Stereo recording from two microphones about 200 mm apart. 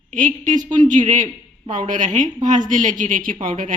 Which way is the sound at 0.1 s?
40° right (ahead or behind).